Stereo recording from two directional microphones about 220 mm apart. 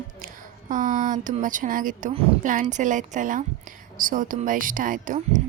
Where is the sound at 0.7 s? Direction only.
35° right (ahead or behind).